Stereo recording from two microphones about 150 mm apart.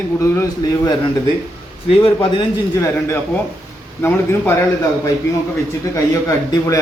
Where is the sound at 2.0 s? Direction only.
35° left (ahead or behind).